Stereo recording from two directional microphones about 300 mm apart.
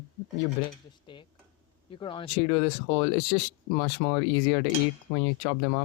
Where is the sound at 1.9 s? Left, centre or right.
Centre.